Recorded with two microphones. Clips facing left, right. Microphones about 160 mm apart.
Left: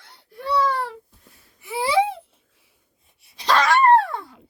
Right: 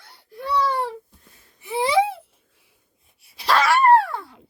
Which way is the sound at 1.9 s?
15° right (ahead or behind).